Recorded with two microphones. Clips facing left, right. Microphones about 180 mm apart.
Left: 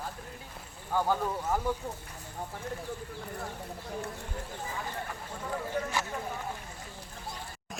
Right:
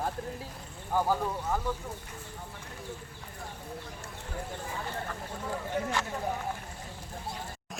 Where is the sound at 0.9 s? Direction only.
10° right (ahead or behind).